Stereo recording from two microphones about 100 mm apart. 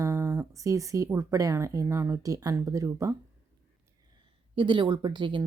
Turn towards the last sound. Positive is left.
turn(degrees=-55)  # may be behind; listen again after turning